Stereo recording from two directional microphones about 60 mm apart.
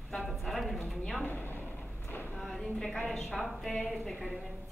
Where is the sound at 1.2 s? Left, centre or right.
Left.